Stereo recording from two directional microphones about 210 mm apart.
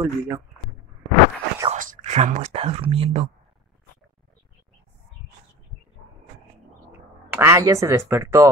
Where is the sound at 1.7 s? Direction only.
40° right (ahead or behind).